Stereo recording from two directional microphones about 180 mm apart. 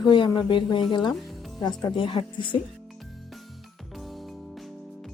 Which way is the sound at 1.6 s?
25° left (ahead or behind).